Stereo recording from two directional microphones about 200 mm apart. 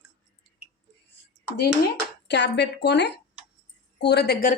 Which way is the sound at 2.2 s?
60° left (ahead or behind).